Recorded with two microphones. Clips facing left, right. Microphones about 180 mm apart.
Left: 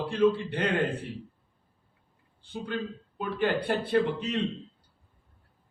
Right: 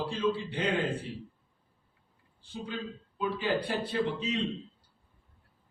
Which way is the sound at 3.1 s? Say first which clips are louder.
Left 2 dB; 60° left (ahead or behind).